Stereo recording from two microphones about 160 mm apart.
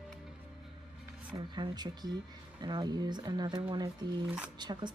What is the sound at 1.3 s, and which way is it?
Speech, 30° right (ahead or behind).